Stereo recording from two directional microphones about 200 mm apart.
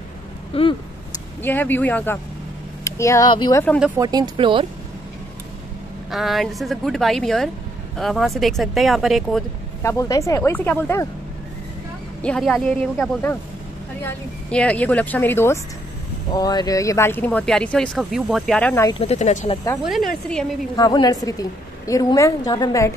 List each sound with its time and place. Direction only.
0.5 s speech: 30° left (ahead or behind)
1.4 s speech: 10° left (ahead or behind)
4.0 s speech: 20° right (ahead or behind)
6.0 s speech: centre (ahead or behind)
9.8 s speech: 15° left (ahead or behind)
12.2 s speech: 5° left (ahead or behind)
18.9 s speech: 30° left (ahead or behind)
20.7 s speech: 20° left (ahead or behind)